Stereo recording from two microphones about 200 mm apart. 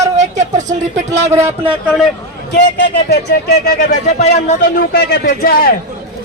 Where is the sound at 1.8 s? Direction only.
Centre (ahead or behind).